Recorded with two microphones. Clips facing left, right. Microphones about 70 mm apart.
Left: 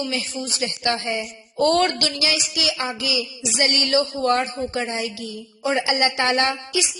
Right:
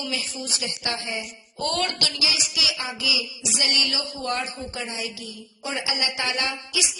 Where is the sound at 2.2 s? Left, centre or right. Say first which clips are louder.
Left 3 dB; left.